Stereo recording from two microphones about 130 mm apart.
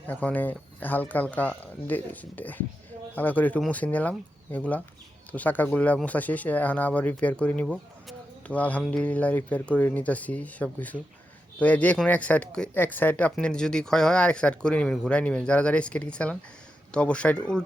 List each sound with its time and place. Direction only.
0.1 s speech: 10° left (ahead or behind)